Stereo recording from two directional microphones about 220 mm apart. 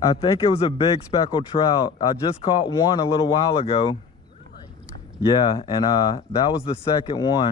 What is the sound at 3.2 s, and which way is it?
Speech, 20° left (ahead or behind).